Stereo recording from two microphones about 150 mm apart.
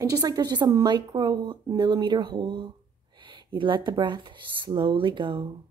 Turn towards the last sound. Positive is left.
turn(degrees=-35)  # may be behind; listen again after turning